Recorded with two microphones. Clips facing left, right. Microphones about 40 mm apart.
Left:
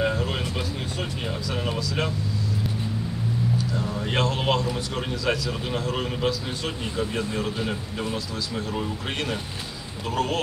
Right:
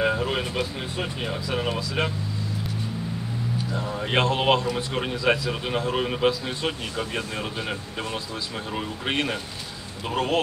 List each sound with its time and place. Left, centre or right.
0.0 s speech: centre
3.7 s speech: right